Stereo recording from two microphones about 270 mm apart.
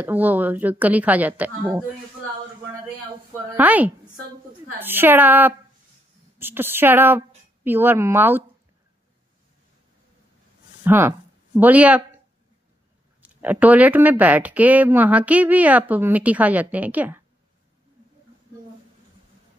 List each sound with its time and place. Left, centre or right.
0.0 s speech: centre
3.5 s a woman's voice: centre
10.8 s speech: centre
13.3 s speech: centre